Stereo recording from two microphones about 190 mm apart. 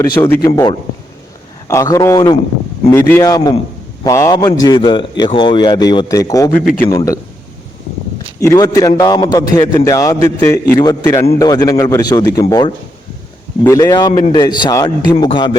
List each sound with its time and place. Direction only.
0.0 s a man's voice: 10° left (ahead or behind)
8.4 s a man's voice: 15° left (ahead or behind)